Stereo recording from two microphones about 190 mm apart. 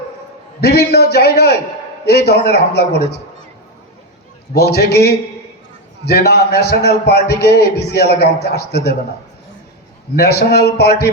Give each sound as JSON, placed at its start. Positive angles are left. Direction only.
{"t": 0.6, "sound": "a man's voice", "side_deg": 60}
{"t": 4.5, "sound": "a man's voice", "side_deg": 60}
{"t": 10.2, "sound": "a man's voice", "side_deg": 60}